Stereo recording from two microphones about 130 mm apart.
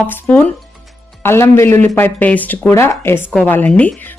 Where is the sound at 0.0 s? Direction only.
15° left (ahead or behind).